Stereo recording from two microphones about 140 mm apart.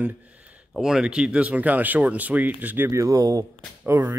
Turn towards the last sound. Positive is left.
turn(degrees=-15)  # may be behind; listen again after turning